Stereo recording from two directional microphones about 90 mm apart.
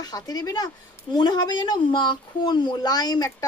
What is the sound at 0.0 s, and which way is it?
A woman's voice, 45° left (ahead or behind).